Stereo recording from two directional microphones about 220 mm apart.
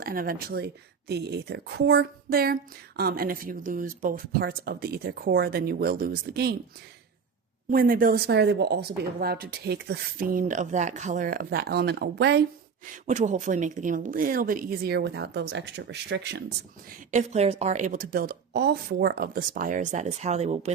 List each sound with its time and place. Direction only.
0.0 s speech: 40° right (ahead or behind)
7.7 s speech: 40° right (ahead or behind)
12.8 s a woman's voice: 35° right (ahead or behind); by 16.4 s 50° right (ahead or behind)
17.1 s a woman's voice: 30° right (ahead or behind)